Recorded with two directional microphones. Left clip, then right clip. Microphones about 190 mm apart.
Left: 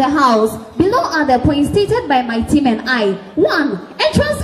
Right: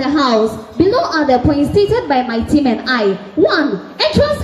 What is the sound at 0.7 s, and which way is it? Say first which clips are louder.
A woman's voice: right 1 dB; 55° left (ahead or behind).